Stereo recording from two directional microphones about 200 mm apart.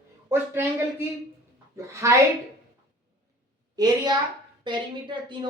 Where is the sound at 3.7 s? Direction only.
20° right (ahead or behind).